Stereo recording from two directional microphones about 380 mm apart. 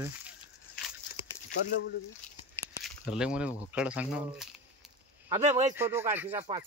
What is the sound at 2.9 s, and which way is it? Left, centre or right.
Speech, centre.